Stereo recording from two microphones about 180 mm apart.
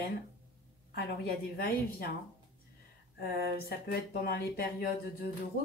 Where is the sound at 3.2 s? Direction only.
55° left (ahead or behind).